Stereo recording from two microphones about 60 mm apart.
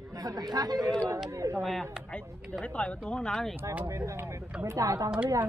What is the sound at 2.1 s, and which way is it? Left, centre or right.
Battle cry, centre.